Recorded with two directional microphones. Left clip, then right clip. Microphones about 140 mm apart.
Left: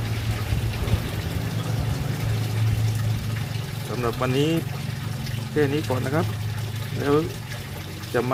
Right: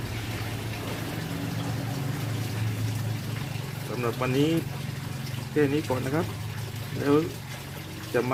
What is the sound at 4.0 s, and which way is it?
Speech, 10° left (ahead or behind).